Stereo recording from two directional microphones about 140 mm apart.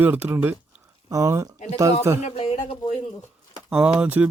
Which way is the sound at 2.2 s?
45° left (ahead or behind).